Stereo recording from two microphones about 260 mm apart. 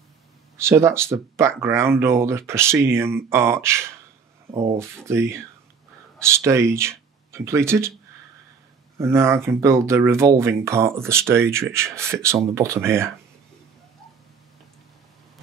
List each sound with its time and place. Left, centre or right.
0.6 s speech: centre
4.5 s speech: right
4.7 s speech: centre
8.9 s speech: centre